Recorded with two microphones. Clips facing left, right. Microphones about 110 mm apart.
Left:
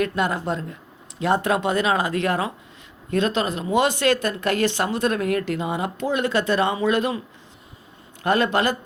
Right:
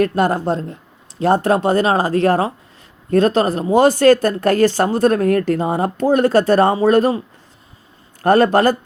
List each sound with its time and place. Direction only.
0.0 s speech: 40° right (ahead or behind)
8.2 s a man's voice: 40° right (ahead or behind)